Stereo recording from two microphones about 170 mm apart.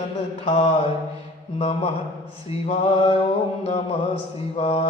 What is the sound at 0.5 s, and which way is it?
Mantra, 35° left (ahead or behind).